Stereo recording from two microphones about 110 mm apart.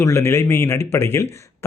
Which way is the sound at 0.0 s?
25° left (ahead or behind).